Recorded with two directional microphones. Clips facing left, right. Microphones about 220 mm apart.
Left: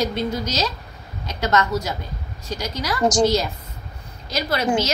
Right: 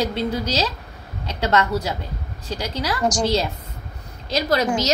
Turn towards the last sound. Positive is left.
turn(degrees=-40)  # may be behind; listen again after turning